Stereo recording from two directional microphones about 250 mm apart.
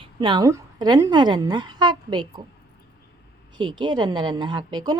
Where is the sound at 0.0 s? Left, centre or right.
Centre.